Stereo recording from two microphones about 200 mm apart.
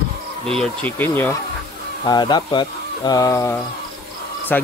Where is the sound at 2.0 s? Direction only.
20° left (ahead or behind).